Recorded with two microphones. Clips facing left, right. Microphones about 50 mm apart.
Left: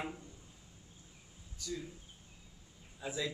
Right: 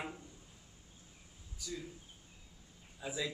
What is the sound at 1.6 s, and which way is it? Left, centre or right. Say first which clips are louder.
Speech: left 2 dB; centre.